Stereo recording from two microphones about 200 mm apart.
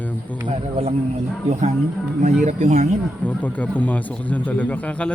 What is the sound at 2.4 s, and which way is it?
Speech, 35° right (ahead or behind).